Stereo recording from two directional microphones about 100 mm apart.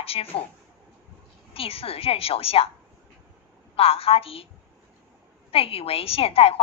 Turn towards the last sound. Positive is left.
turn(degrees=70)  # may be behind; listen again after turning